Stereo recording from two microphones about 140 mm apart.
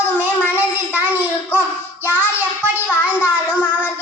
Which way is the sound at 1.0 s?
10° right (ahead or behind).